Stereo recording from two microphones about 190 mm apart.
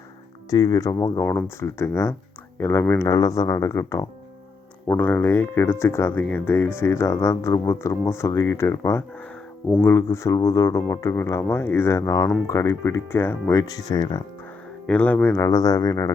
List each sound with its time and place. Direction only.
0.5 s speech: 20° left (ahead or behind)
14.8 s speech: 5° left (ahead or behind)